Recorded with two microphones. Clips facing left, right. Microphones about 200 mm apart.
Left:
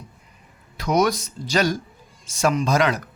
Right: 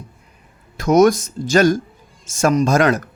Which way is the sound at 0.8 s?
45° right (ahead or behind).